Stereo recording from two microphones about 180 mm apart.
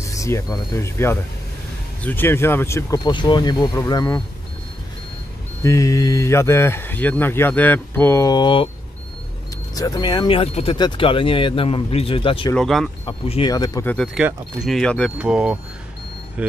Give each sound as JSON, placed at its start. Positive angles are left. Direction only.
{"t": 0.0, "sound": "speech", "side_deg": 15}
{"t": 5.6, "sound": "speech", "side_deg": 15}
{"t": 9.8, "sound": "speech", "side_deg": 20}
{"t": 12.5, "sound": "speech", "side_deg": 5}
{"t": 13.0, "sound": "speech", "side_deg": 30}
{"t": 13.8, "sound": "speech", "side_deg": 5}